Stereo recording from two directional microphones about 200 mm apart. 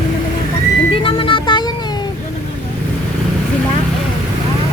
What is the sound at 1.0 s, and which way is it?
Music, 25° left (ahead or behind).